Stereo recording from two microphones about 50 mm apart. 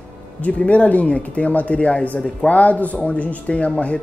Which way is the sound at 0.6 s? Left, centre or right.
Left.